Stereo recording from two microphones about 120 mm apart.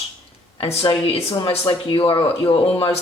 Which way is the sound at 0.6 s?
50° left (ahead or behind).